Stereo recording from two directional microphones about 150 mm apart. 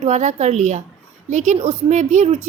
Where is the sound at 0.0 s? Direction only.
50° right (ahead or behind).